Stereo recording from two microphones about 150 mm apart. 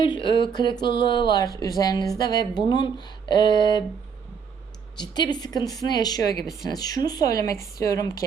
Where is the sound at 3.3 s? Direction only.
30° left (ahead or behind).